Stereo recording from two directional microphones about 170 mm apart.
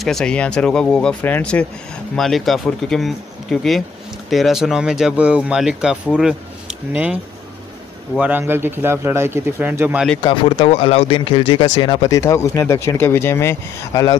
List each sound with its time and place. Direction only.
0.0 s speech: 5° left (ahead or behind)
8.2 s speech: 10° right (ahead or behind)
10.2 s speech: 30° left (ahead or behind)